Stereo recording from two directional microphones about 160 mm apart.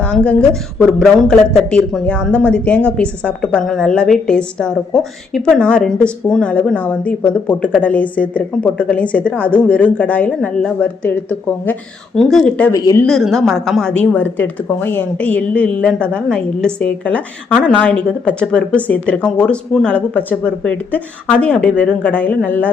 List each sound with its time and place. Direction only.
0.0 s a woman's voice: 10° left (ahead or behind)
12.7 s speech: 25° left (ahead or behind)
13.0 s speech: centre (ahead or behind)